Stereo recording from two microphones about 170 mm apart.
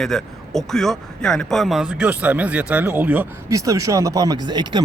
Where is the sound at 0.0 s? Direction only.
Centre (ahead or behind).